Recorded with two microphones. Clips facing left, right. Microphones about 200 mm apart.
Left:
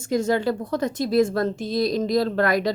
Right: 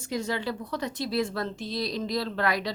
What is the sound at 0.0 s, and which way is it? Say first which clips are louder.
A woman's voice: left 9 dB; 45° left (ahead or behind).